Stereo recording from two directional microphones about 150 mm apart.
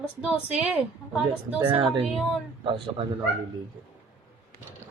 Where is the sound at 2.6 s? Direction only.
35° right (ahead or behind).